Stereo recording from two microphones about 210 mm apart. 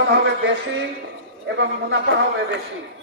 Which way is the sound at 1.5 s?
60° right (ahead or behind).